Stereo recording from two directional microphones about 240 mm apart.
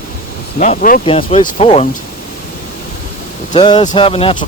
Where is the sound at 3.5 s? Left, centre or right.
Left.